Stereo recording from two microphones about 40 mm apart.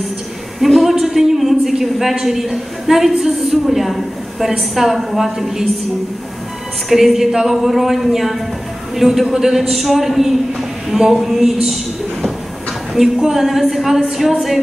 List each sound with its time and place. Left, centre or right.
0.6 s a woman's voice: centre
6.9 s a man's voice: centre